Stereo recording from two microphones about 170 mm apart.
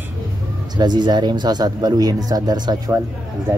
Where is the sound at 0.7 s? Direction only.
25° right (ahead or behind).